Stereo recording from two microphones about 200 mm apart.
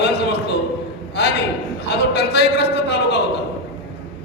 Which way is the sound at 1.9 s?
55° left (ahead or behind).